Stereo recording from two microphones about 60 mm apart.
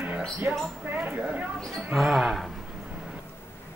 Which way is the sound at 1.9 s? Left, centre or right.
Centre.